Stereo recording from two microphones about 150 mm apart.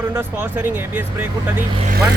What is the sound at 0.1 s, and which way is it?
Speech, 15° right (ahead or behind).